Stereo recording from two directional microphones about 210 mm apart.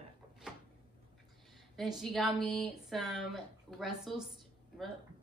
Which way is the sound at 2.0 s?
Centre (ahead or behind).